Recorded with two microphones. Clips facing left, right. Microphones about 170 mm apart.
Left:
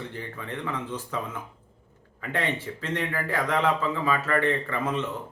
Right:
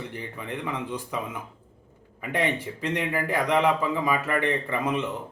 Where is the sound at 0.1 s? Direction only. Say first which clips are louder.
Right 1 dB; 15° right (ahead or behind).